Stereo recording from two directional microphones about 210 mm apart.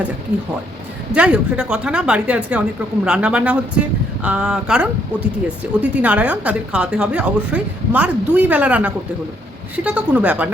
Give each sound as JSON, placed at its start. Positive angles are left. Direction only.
{"t": 1.1, "sound": "a woman's voice", "side_deg": -5}